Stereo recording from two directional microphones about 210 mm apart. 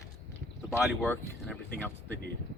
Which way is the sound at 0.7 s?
Centre (ahead or behind).